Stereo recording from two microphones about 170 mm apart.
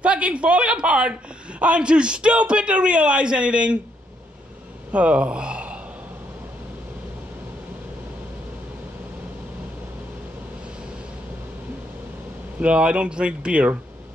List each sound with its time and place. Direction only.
0.0 s a man's voice: 5° right (ahead or behind)
4.9 s speech: 5° right (ahead or behind)
12.5 s a man's voice: 5° right (ahead or behind)